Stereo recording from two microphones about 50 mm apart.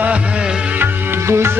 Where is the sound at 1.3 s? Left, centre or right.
Right.